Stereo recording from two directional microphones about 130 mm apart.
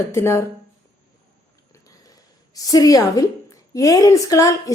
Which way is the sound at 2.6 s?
30° left (ahead or behind).